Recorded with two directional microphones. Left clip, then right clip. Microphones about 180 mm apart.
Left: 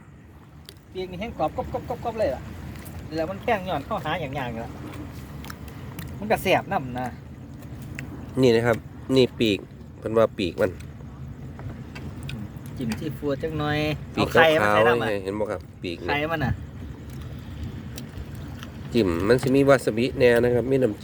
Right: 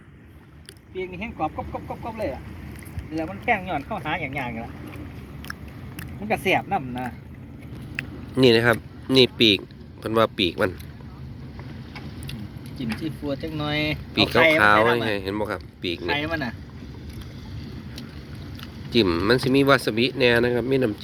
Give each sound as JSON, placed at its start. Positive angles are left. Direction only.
{"t": 0.9, "sound": "speech", "side_deg": 40}
{"t": 6.2, "sound": "speech", "side_deg": 35}
{"t": 7.9, "sound": "speech", "side_deg": 0}
{"t": 12.8, "sound": "speech", "side_deg": 45}
{"t": 14.6, "sound": "speech", "side_deg": 5}
{"t": 16.0, "sound": "speech", "side_deg": 50}
{"t": 18.9, "sound": "speech", "side_deg": 5}